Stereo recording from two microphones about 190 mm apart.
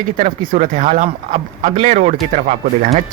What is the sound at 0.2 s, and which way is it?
Speech, 40° right (ahead or behind).